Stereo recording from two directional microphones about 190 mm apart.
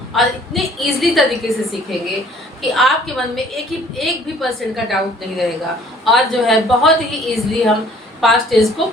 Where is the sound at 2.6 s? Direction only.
Centre (ahead or behind).